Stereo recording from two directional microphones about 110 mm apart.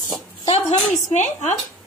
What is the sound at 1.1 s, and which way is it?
Speech, 90° left.